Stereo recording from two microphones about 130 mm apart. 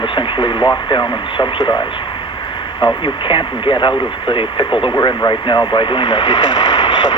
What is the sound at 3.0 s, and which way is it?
Speech, 40° left (ahead or behind).